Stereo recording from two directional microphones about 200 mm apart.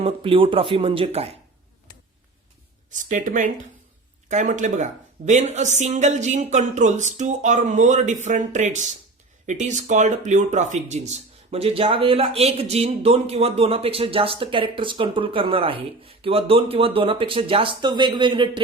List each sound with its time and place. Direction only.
0.0 s speech: 25° right (ahead or behind)
2.9 s speech: 40° right (ahead or behind); by 18.6 s 25° right (ahead or behind)